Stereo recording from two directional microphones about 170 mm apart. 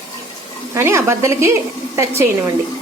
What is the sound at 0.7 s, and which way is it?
Speech, 15° right (ahead or behind).